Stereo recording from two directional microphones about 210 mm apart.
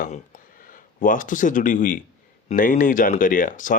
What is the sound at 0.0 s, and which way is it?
Speech, 40° left (ahead or behind).